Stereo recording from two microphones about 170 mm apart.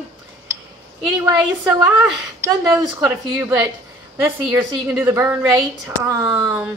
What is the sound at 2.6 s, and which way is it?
A woman's voice, 15° right (ahead or behind).